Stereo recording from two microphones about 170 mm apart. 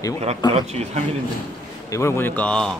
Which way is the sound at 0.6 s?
40° right (ahead or behind).